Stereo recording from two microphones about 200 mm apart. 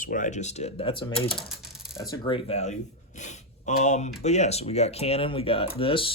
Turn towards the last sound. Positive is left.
turn(degrees=25)  # may be behind; listen again after turning